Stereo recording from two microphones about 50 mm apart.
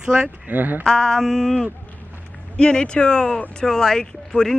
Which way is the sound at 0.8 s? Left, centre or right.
Centre.